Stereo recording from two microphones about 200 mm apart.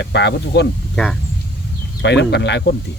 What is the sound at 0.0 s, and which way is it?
Speech, 60° left (ahead or behind).